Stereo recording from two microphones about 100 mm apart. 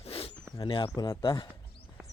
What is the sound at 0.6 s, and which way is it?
Speech, 65° left (ahead or behind).